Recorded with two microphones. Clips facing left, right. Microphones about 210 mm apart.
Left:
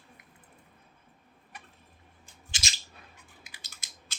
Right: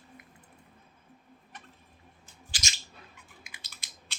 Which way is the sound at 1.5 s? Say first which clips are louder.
Left 1 dB; 10° left (ahead or behind).